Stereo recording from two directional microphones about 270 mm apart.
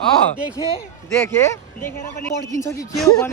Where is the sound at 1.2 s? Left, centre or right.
Centre.